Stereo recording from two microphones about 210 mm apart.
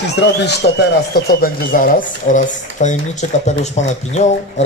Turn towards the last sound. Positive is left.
turn(degrees=30)  # may be behind; listen again after turning